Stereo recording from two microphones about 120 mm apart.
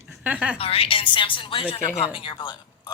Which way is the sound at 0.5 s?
55° left (ahead or behind).